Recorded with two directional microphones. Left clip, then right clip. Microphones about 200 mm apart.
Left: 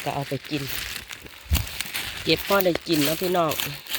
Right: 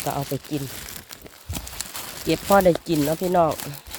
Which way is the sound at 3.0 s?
10° right (ahead or behind).